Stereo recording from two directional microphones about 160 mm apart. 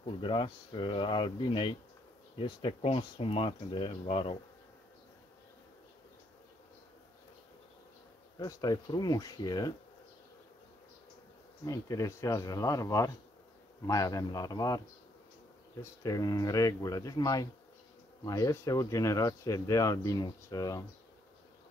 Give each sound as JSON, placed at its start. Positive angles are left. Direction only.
{"t": 0.0, "sound": "speech", "side_deg": 30}
{"t": 8.4, "sound": "speech", "side_deg": 25}
{"t": 11.6, "sound": "speech", "side_deg": 20}
{"t": 15.8, "sound": "speech", "side_deg": 20}